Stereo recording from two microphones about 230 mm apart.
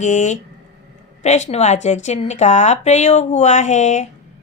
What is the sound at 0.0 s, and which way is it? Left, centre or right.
A woman's voice, left.